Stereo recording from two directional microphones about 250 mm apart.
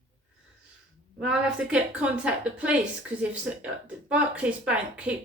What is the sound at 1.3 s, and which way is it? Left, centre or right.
A woman's voice, centre.